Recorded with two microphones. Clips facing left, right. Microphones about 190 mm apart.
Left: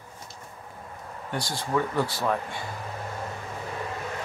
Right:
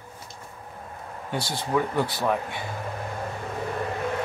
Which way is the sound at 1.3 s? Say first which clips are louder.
Right 2 dB; 25° right (ahead or behind).